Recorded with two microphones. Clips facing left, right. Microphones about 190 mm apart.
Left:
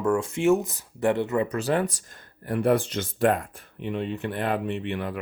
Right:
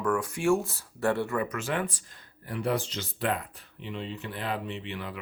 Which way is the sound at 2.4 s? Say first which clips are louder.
Left 7 dB; 55° left (ahead or behind).